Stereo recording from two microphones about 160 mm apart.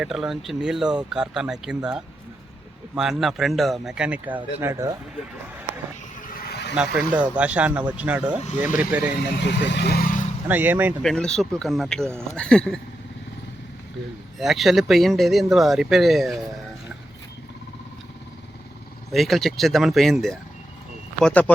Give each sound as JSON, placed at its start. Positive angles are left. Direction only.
{"t": 0.0, "sound": "speech", "side_deg": -5}
{"t": 4.6, "sound": "speech", "side_deg": -20}
{"t": 6.7, "sound": "speech", "side_deg": -10}
{"t": 8.4, "sound": "speech", "side_deg": 50}
{"t": 8.8, "sound": "speech", "side_deg": -10}
{"t": 9.4, "sound": "speech", "side_deg": 90}
{"t": 10.5, "sound": "speech", "side_deg": -10}
{"t": 11.0, "sound": "speech", "side_deg": 5}
{"t": 14.3, "sound": "speech", "side_deg": 0}
{"t": 19.1, "sound": "speech", "side_deg": 0}